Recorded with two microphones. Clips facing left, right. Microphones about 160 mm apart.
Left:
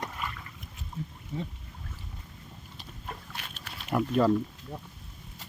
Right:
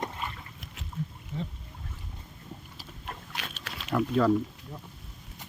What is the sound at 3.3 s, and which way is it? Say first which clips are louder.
Rowboat: right 3 dB; 90° right.